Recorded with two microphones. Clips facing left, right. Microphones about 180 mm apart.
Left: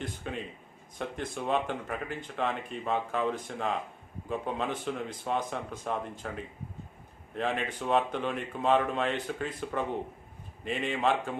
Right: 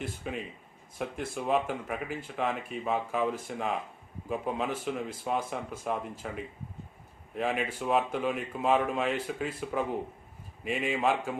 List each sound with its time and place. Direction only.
0.0 s speech: 5° right (ahead or behind)